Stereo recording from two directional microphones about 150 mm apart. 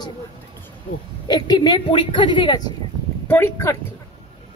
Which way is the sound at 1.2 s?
30° left (ahead or behind).